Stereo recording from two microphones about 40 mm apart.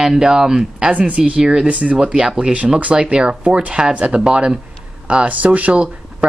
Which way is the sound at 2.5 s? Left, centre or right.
Right.